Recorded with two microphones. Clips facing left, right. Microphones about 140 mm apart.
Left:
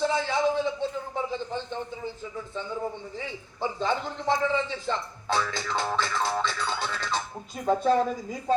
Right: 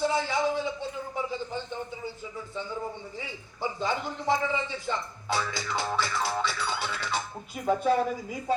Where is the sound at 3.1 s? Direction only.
10° right (ahead or behind).